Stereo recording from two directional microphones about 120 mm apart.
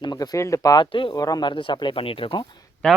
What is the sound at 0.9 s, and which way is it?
Speech, 45° left (ahead or behind).